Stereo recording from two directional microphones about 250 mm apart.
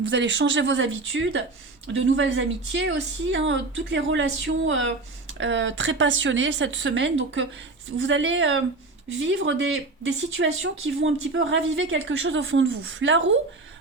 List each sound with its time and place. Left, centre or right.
0.0 s speech: right